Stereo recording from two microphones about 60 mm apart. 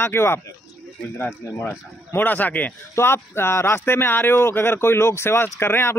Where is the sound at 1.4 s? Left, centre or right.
Left.